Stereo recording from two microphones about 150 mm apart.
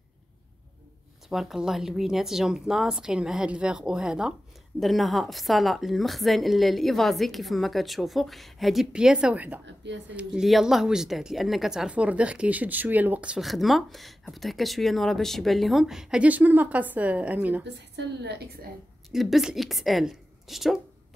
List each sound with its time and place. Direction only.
1.3 s speech: centre (ahead or behind)
18.2 s a woman's voice: 90° right
19.0 s speech: centre (ahead or behind)